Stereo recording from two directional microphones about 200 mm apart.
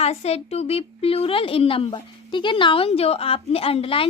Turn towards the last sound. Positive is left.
turn(degrees=30)  # may be behind; listen again after turning